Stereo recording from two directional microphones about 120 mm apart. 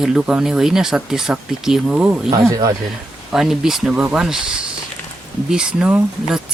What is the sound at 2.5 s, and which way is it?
Speech, 30° right (ahead or behind).